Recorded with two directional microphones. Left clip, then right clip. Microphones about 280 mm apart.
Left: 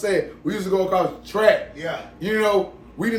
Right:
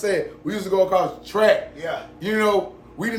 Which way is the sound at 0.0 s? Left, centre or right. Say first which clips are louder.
Left 1 dB; centre.